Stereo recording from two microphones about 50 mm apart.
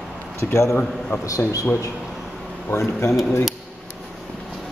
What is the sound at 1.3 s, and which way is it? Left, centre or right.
Speech, left.